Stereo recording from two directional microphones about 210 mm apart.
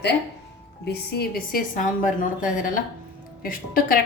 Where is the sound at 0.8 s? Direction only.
45° left (ahead or behind).